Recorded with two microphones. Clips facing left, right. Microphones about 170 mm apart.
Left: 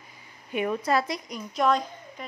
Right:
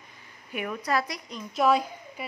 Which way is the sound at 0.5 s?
25° left (ahead or behind).